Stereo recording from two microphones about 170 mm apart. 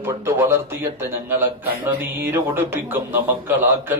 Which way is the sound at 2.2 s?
15° right (ahead or behind).